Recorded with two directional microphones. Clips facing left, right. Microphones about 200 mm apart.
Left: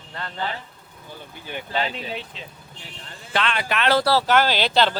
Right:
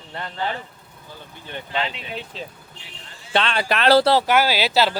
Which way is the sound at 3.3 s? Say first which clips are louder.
Right 3 dB; 30° right (ahead or behind).